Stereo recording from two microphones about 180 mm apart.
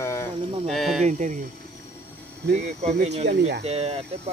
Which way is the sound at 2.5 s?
40° right (ahead or behind).